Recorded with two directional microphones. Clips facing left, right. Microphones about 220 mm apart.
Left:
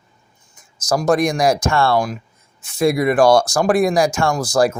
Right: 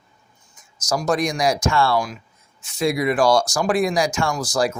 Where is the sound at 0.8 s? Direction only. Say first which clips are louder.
Left 5 dB; 55° left (ahead or behind).